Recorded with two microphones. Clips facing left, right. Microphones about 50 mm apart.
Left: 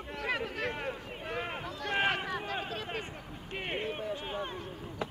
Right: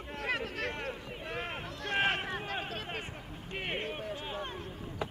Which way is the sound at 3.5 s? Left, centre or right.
Centre.